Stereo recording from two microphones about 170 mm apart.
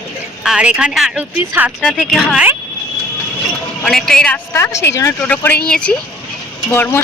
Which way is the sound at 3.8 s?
Centre (ahead or behind).